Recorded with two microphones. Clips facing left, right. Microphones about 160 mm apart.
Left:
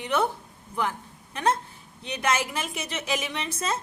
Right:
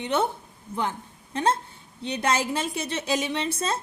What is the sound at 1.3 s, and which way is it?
A woman's voice, 30° right (ahead or behind).